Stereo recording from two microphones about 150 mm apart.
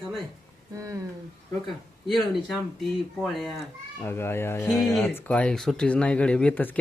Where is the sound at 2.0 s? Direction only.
Centre (ahead or behind).